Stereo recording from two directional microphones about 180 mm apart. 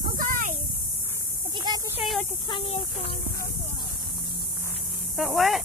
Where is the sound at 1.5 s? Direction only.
25° right (ahead or behind).